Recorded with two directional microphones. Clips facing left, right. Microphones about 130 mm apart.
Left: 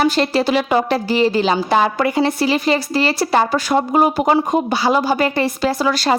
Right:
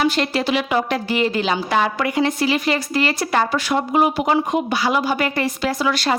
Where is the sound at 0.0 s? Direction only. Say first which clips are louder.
Left 3 dB; 35° left (ahead or behind).